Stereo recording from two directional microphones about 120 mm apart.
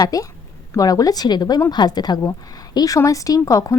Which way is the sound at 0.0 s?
30° left (ahead or behind).